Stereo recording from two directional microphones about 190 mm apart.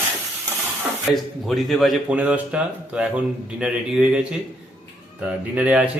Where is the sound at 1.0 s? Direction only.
Centre (ahead or behind).